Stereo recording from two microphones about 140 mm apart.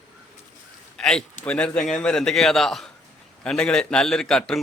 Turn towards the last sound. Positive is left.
turn(degrees=5)  # may be behind; listen again after turning